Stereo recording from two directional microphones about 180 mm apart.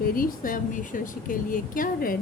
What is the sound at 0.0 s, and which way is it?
Speech, 50° left (ahead or behind).